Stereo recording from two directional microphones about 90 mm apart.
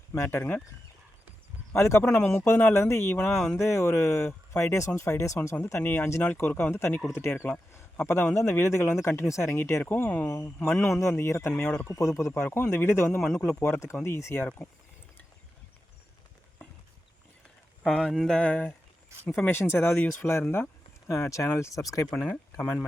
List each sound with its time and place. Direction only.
0.1 s speech: 30° left (ahead or behind)
1.7 s speech: 30° left (ahead or behind)
2.0 s speech: 20° left (ahead or behind)
2.3 s speech: 30° left (ahead or behind)
2.6 s speech: 20° left (ahead or behind)
2.8 s speech: 30° left (ahead or behind)
17.8 s mantra: centre (ahead or behind)
19.2 s speech: 25° left (ahead or behind)
20.2 s speech: 5° left (ahead or behind)
21.1 s speech: 35° left (ahead or behind)